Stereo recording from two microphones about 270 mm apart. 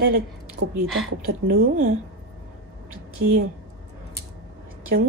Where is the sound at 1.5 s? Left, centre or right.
Right.